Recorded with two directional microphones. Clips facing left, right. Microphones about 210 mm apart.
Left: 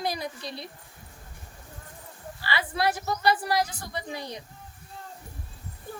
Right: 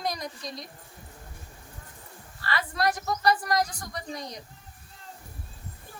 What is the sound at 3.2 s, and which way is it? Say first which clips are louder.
Speech: even; 5° left (ahead or behind).